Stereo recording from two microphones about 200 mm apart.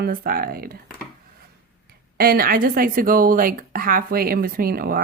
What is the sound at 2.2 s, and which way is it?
Speech, 50° right (ahead or behind).